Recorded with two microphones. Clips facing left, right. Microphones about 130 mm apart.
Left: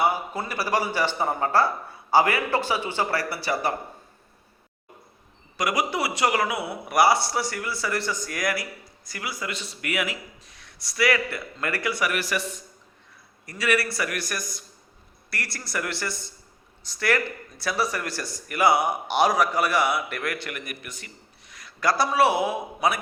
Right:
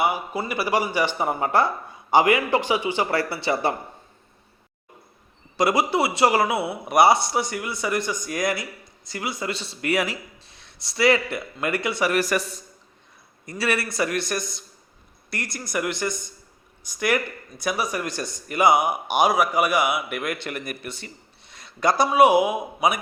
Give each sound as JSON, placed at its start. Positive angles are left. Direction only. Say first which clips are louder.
{"t": 0.0, "sound": "speech", "louder": "right 1 dB", "side_deg": -10}
{"t": 5.5, "sound": "speech", "louder": "right 5 dB", "side_deg": -25}
{"t": 12.1, "sound": "a man's voice", "louder": "right 5 dB", "side_deg": -40}
{"t": 13.4, "sound": "a man's voice", "louder": "even", "side_deg": -25}